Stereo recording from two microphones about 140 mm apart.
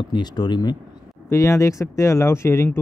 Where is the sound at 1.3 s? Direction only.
20° left (ahead or behind).